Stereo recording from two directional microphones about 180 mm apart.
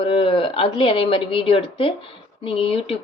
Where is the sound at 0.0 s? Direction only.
30° left (ahead or behind).